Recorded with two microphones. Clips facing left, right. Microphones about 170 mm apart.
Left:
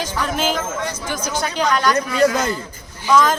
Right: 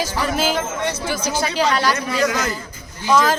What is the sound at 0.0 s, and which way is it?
Speech, 5° right (ahead or behind).